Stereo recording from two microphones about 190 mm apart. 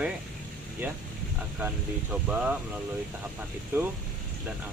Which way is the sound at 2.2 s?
5° right (ahead or behind).